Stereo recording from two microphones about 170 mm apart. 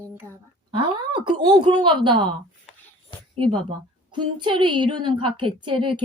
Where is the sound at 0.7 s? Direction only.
30° right (ahead or behind).